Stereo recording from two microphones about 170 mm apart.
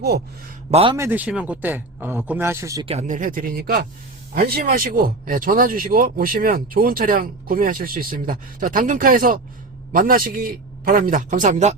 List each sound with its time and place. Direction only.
0.0 s speech: 70° right (ahead or behind)
0.7 s a man's voice: 35° right (ahead or behind)
0.9 s a man's voice: 10° right (ahead or behind)
2.8 s speech: 40° right (ahead or behind)